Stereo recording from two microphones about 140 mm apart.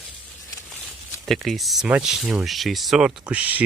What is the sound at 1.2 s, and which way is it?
Speech, centre (ahead or behind).